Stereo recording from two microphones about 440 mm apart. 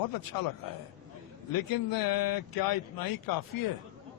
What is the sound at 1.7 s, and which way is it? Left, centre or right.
Speech, left.